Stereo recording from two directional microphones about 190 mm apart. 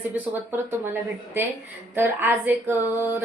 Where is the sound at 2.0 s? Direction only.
10° right (ahead or behind).